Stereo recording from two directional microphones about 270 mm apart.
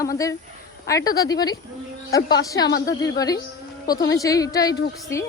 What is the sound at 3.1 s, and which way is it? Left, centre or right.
A woman's voice, centre.